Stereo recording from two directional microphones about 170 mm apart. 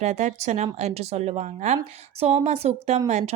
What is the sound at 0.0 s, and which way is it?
A woman's voice, 40° right (ahead or behind).